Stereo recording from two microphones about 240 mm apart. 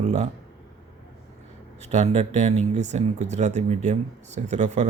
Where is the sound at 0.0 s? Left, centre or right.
Right.